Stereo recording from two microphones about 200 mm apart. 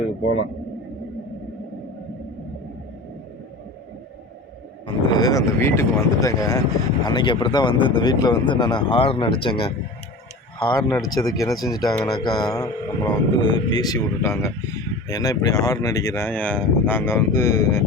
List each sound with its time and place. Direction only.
5.1 s speech: 20° left (ahead or behind)